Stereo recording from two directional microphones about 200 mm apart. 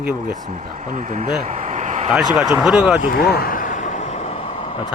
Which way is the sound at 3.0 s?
50° left (ahead or behind).